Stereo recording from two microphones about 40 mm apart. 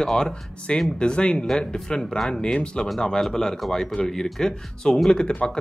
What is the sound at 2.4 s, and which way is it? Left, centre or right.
Speech, left.